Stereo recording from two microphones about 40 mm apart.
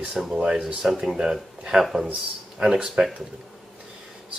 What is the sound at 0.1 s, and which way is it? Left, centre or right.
Speech, centre.